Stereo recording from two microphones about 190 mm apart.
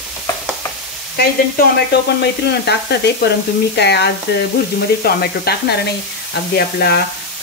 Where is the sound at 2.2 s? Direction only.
60° left (ahead or behind).